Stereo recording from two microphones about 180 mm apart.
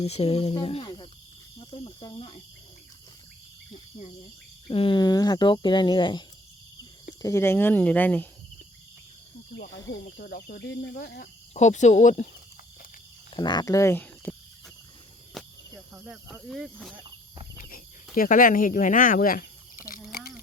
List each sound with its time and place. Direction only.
0.0 s speech: 35° left (ahead or behind)
4.7 s speech: 30° left (ahead or behind); by 8.3 s 10° left (ahead or behind)
9.6 s speech: 60° left (ahead or behind)
11.5 s speech: 40° left (ahead or behind)
13.3 s speech: 25° left (ahead or behind)
15.4 s cricket: centre (ahead or behind)
16.0 s speech: centre (ahead or behind)
17.6 s cricket: 50° left (ahead or behind)
20.1 s a sound: 60° left (ahead or behind)